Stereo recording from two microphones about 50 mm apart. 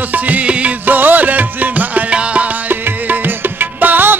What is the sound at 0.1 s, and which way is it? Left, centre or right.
Music, right.